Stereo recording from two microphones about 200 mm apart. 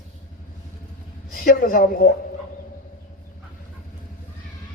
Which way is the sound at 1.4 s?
45° left (ahead or behind).